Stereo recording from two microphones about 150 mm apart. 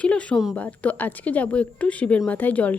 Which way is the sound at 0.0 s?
10° left (ahead or behind).